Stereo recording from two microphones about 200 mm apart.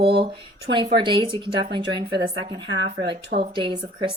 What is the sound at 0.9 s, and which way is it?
A woman's voice, 25° right (ahead or behind).